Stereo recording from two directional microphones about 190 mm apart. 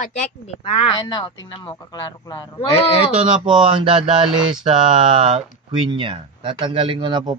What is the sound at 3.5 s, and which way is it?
Speech, 25° right (ahead or behind).